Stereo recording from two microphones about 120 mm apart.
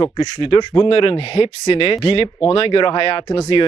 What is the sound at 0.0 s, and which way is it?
Speech, 40° left (ahead or behind).